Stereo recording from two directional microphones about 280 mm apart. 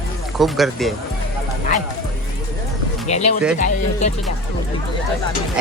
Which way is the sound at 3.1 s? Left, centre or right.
Left.